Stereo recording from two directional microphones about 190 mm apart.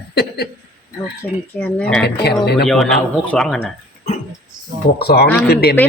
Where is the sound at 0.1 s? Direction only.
55° left (ahead or behind).